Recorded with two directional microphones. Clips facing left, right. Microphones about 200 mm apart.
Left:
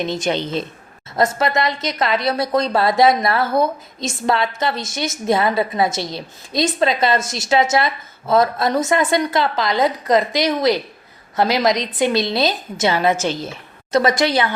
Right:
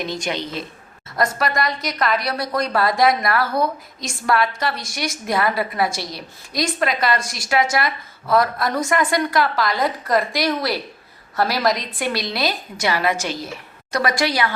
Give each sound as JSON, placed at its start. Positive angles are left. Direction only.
{"t": 0.0, "sound": "a woman's voice", "side_deg": 25}